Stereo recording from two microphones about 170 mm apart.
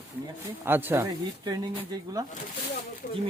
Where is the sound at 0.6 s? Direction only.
10° right (ahead or behind).